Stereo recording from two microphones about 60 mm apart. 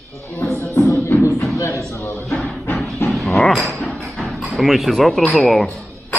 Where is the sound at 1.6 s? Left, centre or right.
Left.